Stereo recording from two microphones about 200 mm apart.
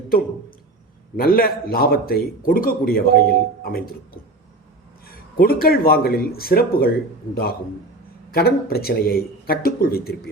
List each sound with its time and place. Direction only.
1.1 s a man's voice: 50° left (ahead or behind)
5.0 s a man's voice: 50° left (ahead or behind)
8.3 s a man's voice: 50° left (ahead or behind)